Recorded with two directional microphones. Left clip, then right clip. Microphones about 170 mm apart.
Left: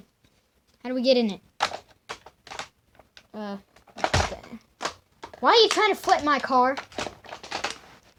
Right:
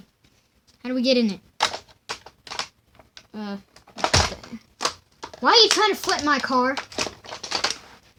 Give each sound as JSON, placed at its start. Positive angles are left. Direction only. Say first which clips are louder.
{"t": 0.8, "sound": "speech", "louder": "even", "side_deg": -30}
{"t": 1.5, "sound": "typewriter", "louder": "right 4 dB", "side_deg": 5}
{"t": 3.3, "sound": "speech", "louder": "even", "side_deg": -25}
{"t": 4.0, "sound": "a sound", "louder": "right 4 dB", "side_deg": 5}
{"t": 5.4, "sound": "speech", "louder": "right 2 dB", "side_deg": -25}
{"t": 6.7, "sound": "crumpling", "louder": "right 5 dB", "side_deg": 10}